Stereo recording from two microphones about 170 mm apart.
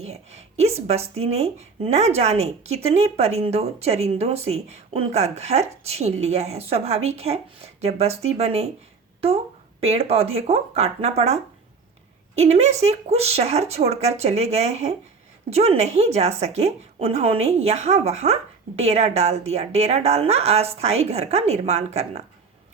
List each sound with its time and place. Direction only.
0.0 s speech: 40° right (ahead or behind)
9.8 s speech: 35° right (ahead or behind)
12.4 s speech: 40° right (ahead or behind)